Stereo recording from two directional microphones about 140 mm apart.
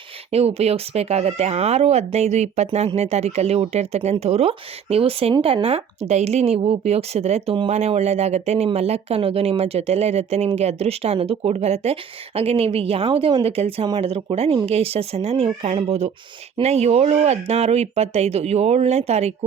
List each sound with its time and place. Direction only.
0.3 s speech: 45° right (ahead or behind)